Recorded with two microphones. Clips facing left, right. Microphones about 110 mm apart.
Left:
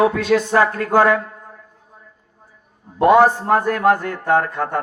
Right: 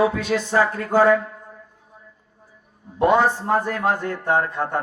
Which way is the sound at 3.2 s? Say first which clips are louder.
Left 5 dB; 65° left (ahead or behind).